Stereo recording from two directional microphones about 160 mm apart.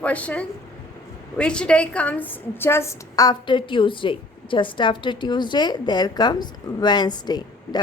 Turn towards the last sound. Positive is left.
turn(degrees=25)  # may be behind; listen again after turning